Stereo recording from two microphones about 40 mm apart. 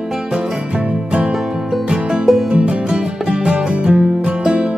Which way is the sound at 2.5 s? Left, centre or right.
Right.